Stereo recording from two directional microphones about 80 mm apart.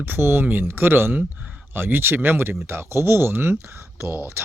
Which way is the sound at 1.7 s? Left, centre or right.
Right.